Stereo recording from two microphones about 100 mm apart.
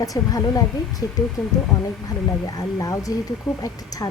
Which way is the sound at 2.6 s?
35° left (ahead or behind).